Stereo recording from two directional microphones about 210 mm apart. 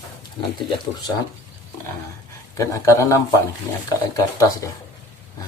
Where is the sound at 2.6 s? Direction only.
15° left (ahead or behind).